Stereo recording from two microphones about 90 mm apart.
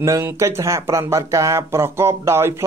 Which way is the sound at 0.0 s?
35° right (ahead or behind).